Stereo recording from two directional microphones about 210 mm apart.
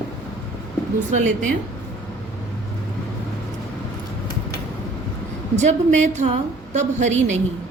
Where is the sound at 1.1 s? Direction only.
35° right (ahead or behind).